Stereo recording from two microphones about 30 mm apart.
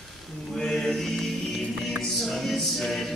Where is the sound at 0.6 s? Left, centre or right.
Centre.